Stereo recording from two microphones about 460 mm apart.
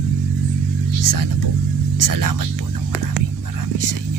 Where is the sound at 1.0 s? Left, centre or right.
Right.